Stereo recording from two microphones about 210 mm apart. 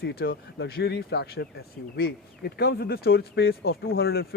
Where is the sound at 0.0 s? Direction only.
45° left (ahead or behind).